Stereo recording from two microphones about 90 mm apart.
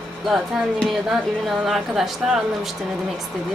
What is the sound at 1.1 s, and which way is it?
Speech, centre (ahead or behind).